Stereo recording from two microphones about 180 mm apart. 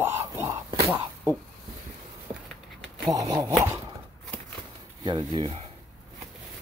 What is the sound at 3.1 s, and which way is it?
Speech, 20° right (ahead or behind).